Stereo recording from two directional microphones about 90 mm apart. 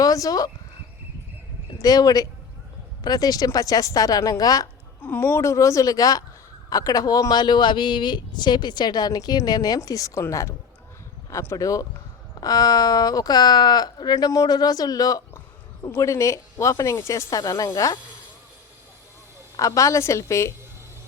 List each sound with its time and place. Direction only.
0.0 s speech: 40° left (ahead or behind)
1.8 s a man's voice: 45° left (ahead or behind)
4.9 s a woman's voice: 20° left (ahead or behind); by 17.7 s 40° left (ahead or behind)
19.5 s a woman's voice: 40° left (ahead or behind)